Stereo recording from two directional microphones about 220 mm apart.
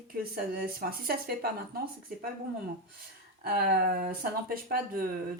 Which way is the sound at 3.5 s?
45° right (ahead or behind).